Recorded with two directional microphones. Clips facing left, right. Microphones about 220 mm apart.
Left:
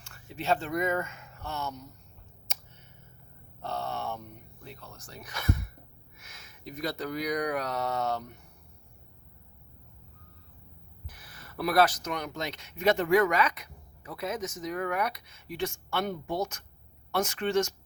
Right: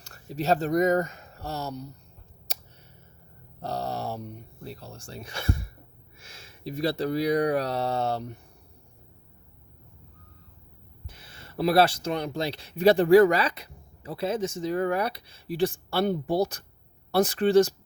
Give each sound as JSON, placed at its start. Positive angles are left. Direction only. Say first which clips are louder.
{"t": 0.0, "sound": "speech", "louder": "right 6 dB", "side_deg": -40}
{"t": 2.5, "sound": "a sound", "louder": "right 3 dB", "side_deg": -35}
{"t": 3.6, "sound": "speech", "louder": "right 3 dB", "side_deg": -35}
{"t": 11.1, "sound": "speech", "louder": "right 5 dB", "side_deg": -25}